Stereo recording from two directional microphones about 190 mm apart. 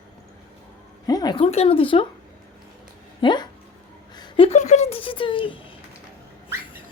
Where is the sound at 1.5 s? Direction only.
30° left (ahead or behind).